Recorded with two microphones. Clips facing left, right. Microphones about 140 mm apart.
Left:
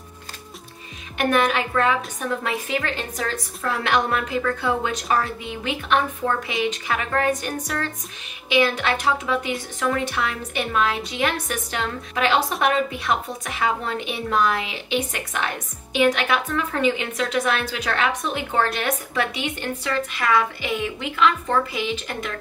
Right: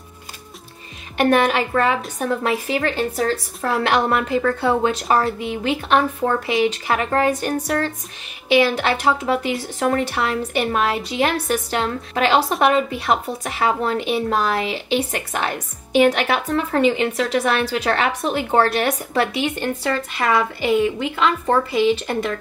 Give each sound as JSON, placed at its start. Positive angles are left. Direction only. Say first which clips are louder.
{"t": 1.1, "sound": "a woman's voice", "louder": "right 4 dB", "side_deg": -35}